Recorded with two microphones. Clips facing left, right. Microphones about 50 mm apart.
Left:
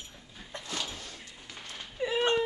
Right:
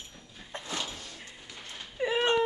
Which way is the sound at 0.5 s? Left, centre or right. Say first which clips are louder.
Right 2 dB; right.